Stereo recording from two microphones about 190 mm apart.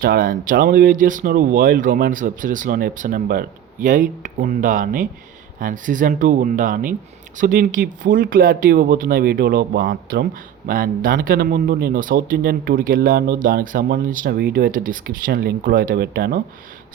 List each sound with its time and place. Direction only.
0.0 s speech: 50° right (ahead or behind)